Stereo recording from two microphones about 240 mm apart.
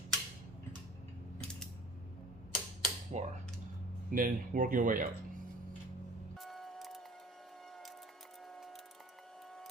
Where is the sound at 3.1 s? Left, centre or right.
Right.